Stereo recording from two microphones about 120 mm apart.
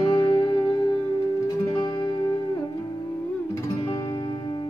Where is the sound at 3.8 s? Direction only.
35° left (ahead or behind).